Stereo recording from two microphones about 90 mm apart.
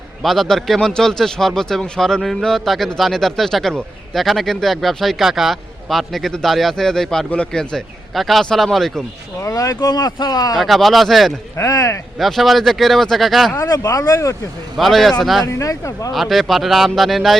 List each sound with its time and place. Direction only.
0.2 s speech: centre (ahead or behind)
9.4 s speech: 35° left (ahead or behind)
10.6 s speech: centre (ahead or behind)
11.5 s speech: 35° left (ahead or behind)
12.2 s speech: centre (ahead or behind)
13.6 s speech: 40° left (ahead or behind)
14.8 s speech: centre (ahead or behind)
15.4 s speech: 35° left (ahead or behind)
16.1 s speech: centre (ahead or behind)